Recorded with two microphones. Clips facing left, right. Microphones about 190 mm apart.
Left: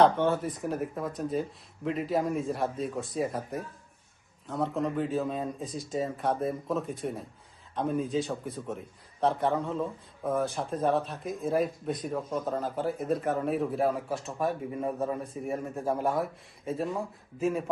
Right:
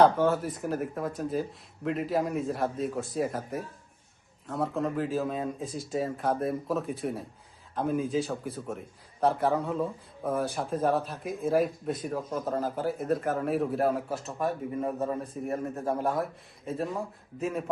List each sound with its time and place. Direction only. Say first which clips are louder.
0.0 s speech: right 1 dB; centre (ahead or behind)